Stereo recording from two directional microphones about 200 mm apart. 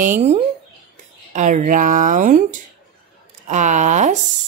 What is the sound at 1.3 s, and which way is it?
Speech, 40° right (ahead or behind).